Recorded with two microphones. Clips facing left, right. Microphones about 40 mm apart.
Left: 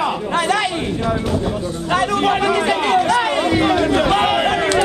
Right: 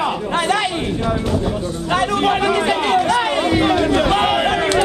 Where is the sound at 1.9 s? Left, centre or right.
Right.